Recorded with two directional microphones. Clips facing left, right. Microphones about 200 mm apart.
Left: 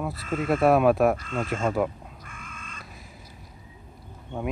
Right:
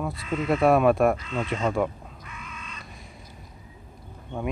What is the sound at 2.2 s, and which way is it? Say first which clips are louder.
Crow: right 2 dB; 50° left (ahead or behind).